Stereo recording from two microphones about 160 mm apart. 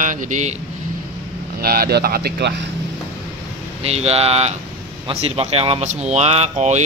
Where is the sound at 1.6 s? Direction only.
70° right (ahead or behind); by 2.5 s 85° right.